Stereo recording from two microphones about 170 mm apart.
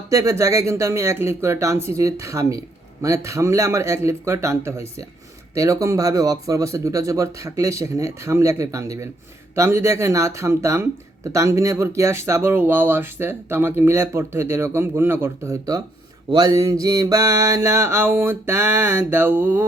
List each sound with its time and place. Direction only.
0.1 s speech: 20° right (ahead or behind)